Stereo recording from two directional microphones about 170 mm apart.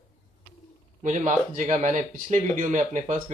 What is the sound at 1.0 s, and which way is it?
Speech, 45° right (ahead or behind).